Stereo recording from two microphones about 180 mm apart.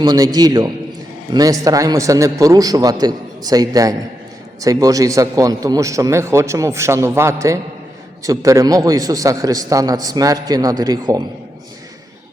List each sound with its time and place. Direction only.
0.0 s a man's voice: 20° right (ahead or behind)